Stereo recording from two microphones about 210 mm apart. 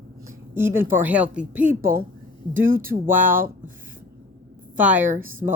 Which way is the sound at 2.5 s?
40° right (ahead or behind).